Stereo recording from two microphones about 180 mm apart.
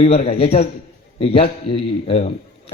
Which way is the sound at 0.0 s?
35° left (ahead or behind).